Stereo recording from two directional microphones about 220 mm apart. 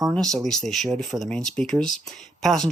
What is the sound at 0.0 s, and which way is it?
Speech, centre (ahead or behind).